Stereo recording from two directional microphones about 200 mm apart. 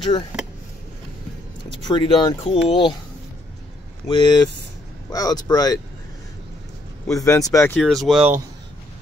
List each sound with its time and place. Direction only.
1.7 s speech: 25° left (ahead or behind)
4.1 s speech: 25° left (ahead or behind)
7.1 s speech: 15° left (ahead or behind)
7.8 s speech: centre (ahead or behind)